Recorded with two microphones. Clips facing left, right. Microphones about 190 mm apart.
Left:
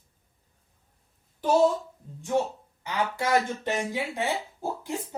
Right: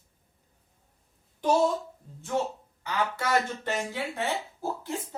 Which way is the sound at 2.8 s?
15° left (ahead or behind).